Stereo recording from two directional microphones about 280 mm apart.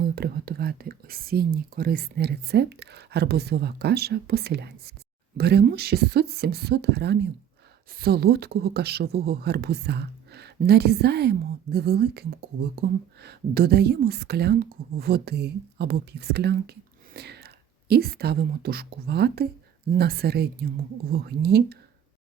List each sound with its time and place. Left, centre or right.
0.0 s speech: right